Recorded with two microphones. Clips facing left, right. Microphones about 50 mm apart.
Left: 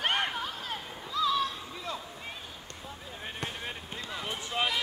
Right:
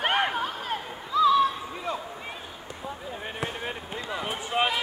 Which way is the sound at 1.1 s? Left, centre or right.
Centre.